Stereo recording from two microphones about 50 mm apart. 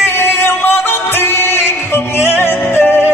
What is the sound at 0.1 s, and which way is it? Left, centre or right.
Music, left.